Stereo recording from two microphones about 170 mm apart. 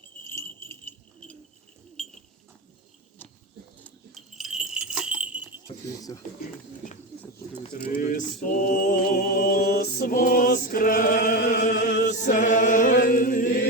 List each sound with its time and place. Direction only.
0.3 s jingle bell: 15° left (ahead or behind)
2.0 s bird: 5° left (ahead or behind)
3.8 s dog: 10° left (ahead or behind)
4.4 s jingle bell: centre (ahead or behind)
5.6 s speech: 20° left (ahead or behind)
7.7 s music: 55° left (ahead or behind); by 12.0 s 70° left (ahead or behind)
12.0 s chant: 45° left (ahead or behind)